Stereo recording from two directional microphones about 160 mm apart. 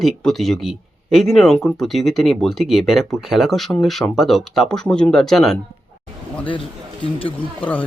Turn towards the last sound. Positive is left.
turn(degrees=10)  # may be behind; listen again after turning